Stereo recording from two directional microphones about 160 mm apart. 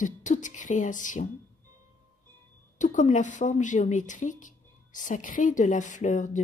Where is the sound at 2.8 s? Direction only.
50° left (ahead or behind).